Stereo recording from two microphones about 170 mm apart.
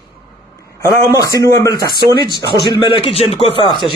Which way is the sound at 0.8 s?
20° left (ahead or behind).